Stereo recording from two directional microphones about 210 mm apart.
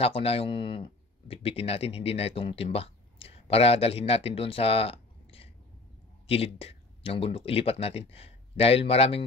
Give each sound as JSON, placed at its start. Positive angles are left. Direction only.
{"t": 0.0, "sound": "speech", "side_deg": 30}